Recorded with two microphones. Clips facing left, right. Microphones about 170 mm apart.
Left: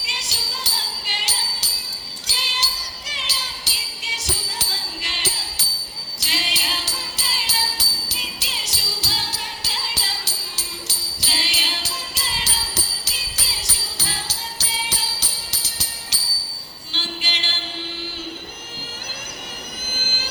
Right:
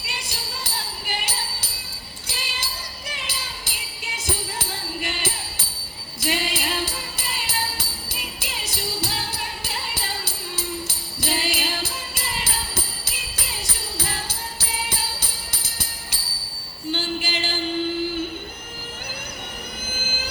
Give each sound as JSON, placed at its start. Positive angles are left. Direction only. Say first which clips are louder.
{"t": 0.0, "sound": "music", "louder": "right 1 dB", "side_deg": -55}
{"t": 2.2, "sound": "jingle bell", "louder": "left 2 dB", "side_deg": -55}
{"t": 4.7, "sound": "music", "louder": "right 5 dB", "side_deg": -55}
{"t": 6.1, "sound": "jingle bell", "louder": "right 6 dB", "side_deg": -55}
{"t": 15.6, "sound": "music", "louder": "even", "side_deg": -55}
{"t": 16.9, "sound": "a sound", "louder": "right 6 dB", "side_deg": -55}
{"t": 20.0, "sound": "vehicle", "louder": "right 2 dB", "side_deg": -55}